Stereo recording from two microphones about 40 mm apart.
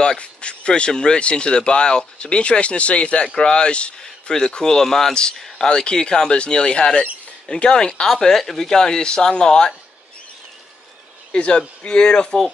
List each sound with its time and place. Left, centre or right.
0.0 s speech: left
8.1 s speech: centre
11.3 s speech: left